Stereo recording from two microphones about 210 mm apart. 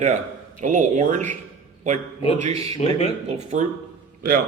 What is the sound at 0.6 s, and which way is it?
Speech, 35° right (ahead or behind).